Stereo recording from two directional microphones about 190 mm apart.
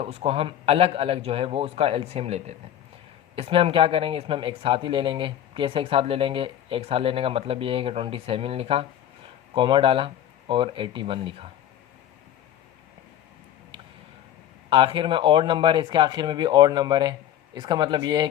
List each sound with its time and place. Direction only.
0.0 s a man's voice: 30° right (ahead or behind)
14.7 s speech: 25° right (ahead or behind)